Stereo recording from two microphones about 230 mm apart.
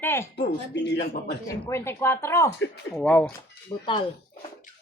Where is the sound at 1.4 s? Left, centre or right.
Centre.